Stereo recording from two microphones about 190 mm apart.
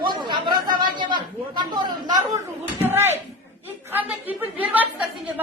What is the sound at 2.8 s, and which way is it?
A woman's voice, 10° right (ahead or behind).